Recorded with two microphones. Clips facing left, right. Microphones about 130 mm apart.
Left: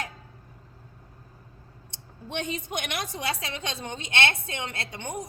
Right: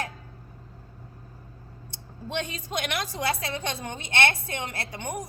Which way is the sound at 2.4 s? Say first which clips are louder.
Left 1 dB; 20° left (ahead or behind).